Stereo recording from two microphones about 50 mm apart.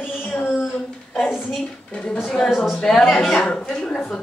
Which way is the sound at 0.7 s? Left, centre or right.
Centre.